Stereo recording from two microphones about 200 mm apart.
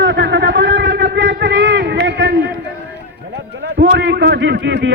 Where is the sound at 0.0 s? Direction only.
60° right (ahead or behind).